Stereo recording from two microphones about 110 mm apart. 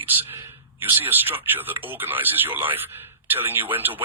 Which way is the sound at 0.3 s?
25° right (ahead or behind).